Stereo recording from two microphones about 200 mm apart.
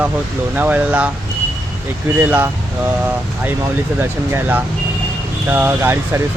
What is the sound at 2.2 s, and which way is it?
Speech, 10° right (ahead or behind).